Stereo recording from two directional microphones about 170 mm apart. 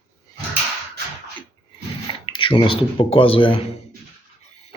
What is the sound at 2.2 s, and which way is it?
Speech, 30° left (ahead or behind).